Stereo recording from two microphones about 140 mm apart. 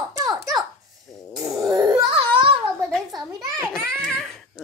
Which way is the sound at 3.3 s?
20° right (ahead or behind).